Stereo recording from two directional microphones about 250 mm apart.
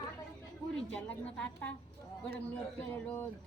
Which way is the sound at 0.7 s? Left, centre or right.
Centre.